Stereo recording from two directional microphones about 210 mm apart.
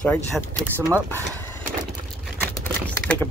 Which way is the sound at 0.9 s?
10° left (ahead or behind).